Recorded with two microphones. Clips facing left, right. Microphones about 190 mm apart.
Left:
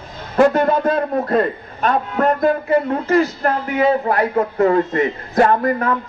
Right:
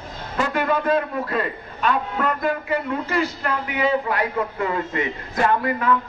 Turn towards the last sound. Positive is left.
turn(degrees=45)  # may be behind; listen again after turning